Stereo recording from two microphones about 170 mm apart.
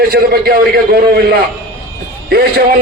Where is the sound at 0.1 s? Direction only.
65° right (ahead or behind).